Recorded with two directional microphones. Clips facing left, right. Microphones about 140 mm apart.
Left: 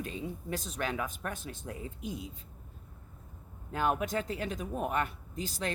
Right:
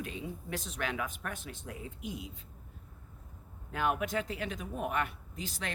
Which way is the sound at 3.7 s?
35° left (ahead or behind).